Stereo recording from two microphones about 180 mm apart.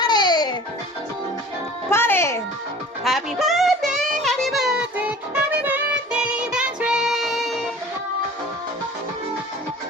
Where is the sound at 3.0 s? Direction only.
Centre (ahead or behind).